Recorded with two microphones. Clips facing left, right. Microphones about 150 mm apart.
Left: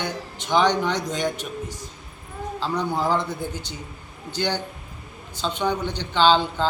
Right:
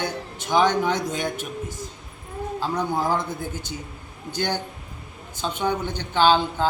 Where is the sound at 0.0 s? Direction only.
10° right (ahead or behind).